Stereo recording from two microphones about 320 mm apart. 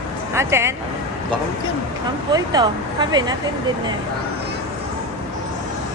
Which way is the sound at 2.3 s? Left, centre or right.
Centre.